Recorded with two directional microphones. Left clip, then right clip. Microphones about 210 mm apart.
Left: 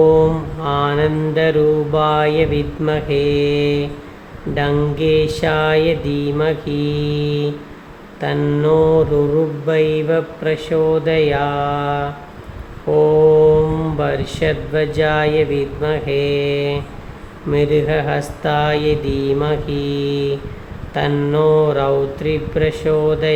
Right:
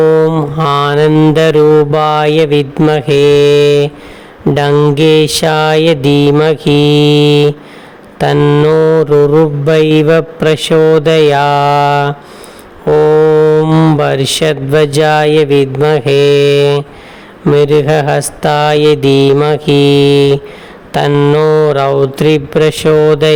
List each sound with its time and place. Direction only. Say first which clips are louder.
0.0 s mantra: right 4 dB; 50° right (ahead or behind)
8.2 s speech: right 9 dB; 50° right (ahead or behind)
9.6 s mantra: right 7 dB; 55° right (ahead or behind)
12.9 s speech: right 5 dB; 55° right (ahead or behind)
17.5 s mantra: right 8 dB; 55° right (ahead or behind)
20.9 s speech: right 9 dB; 55° right (ahead or behind)